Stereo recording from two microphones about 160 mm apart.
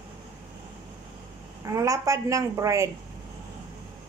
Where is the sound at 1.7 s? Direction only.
20° right (ahead or behind).